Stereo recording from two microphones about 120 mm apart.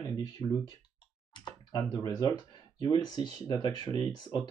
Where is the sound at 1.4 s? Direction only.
35° left (ahead or behind).